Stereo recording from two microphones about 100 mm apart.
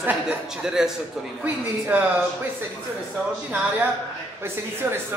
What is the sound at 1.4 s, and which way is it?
Speech, 15° right (ahead or behind).